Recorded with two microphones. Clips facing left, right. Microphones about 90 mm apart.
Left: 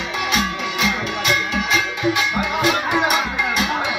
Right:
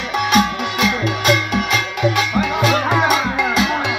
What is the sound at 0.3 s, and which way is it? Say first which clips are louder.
Music: right 7 dB; 50° right (ahead or behind).